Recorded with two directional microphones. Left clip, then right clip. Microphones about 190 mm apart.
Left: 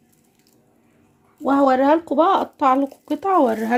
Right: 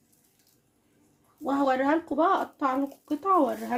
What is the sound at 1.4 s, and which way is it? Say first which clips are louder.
Speech: left 9 dB; 55° left (ahead or behind).